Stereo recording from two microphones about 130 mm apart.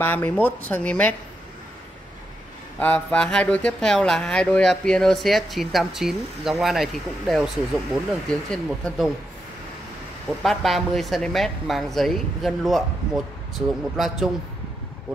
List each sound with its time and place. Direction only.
0.0 s speech: 15° left (ahead or behind)
2.8 s speech: 10° left (ahead or behind)
10.4 s speech: centre (ahead or behind)